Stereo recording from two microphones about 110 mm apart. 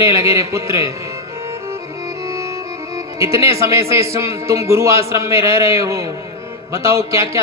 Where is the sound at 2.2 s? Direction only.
25° right (ahead or behind).